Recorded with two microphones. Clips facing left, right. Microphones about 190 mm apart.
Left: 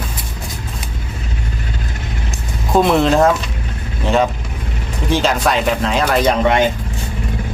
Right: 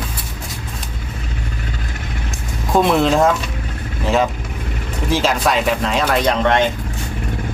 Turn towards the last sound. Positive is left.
turn(degrees=10)  # may be behind; listen again after turning